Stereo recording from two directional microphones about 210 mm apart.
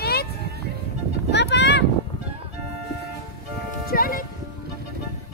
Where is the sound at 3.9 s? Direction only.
45° left (ahead or behind).